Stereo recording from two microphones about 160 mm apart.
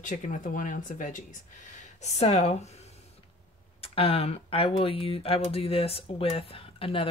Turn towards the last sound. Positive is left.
turn(degrees=35)  # may be behind; listen again after turning